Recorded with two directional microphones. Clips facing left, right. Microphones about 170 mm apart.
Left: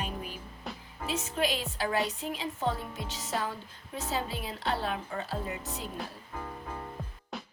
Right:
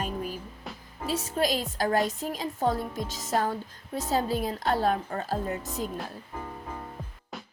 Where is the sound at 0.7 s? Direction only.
Centre (ahead or behind).